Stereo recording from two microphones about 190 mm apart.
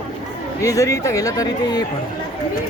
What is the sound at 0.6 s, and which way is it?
Speech, 15° left (ahead or behind).